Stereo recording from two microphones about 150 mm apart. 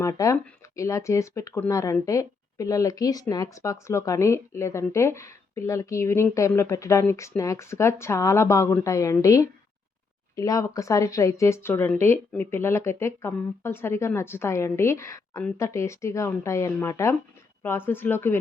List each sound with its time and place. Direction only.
0.0 s speech: 20° left (ahead or behind)